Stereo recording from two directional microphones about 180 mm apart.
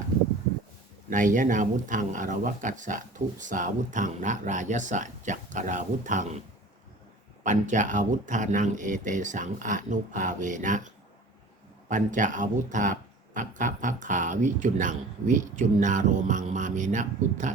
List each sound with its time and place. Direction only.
1.1 s speech: 45° right (ahead or behind)
7.4 s speech: 45° right (ahead or behind)